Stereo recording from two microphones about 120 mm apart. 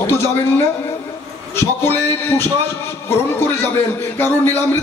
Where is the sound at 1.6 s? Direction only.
20° left (ahead or behind).